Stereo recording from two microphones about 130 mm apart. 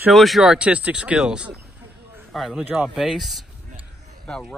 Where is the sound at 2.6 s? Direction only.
10° right (ahead or behind).